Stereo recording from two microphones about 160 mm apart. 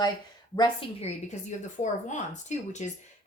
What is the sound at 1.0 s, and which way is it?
Speech, 45° left (ahead or behind).